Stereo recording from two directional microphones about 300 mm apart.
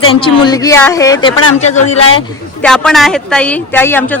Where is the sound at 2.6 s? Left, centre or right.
Centre.